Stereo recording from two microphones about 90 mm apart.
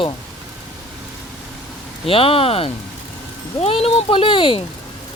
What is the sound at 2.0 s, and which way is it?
Speech, 90° left.